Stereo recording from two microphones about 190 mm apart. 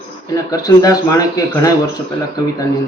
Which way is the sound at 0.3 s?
15° left (ahead or behind).